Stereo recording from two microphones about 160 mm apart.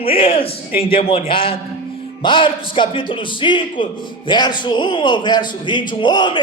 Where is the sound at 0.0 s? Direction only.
35° left (ahead or behind).